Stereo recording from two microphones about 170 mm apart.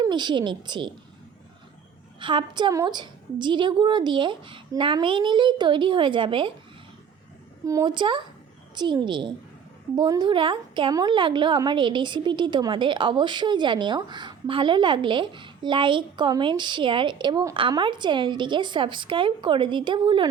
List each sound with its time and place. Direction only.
0.0 s a woman's voice: 25° right (ahead or behind)
2.1 s a woman's voice: 30° right (ahead or behind)
7.6 s a woman's voice: 20° right (ahead or behind)